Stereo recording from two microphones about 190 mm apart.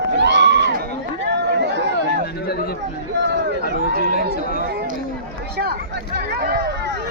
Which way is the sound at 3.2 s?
65° right (ahead or behind).